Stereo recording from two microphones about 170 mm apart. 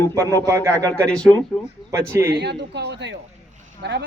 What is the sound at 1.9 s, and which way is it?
Speech, 15° right (ahead or behind).